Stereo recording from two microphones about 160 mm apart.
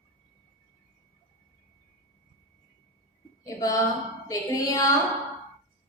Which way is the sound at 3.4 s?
20° left (ahead or behind).